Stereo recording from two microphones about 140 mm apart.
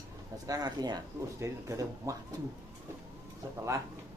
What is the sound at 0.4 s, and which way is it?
Speech, 25° right (ahead or behind).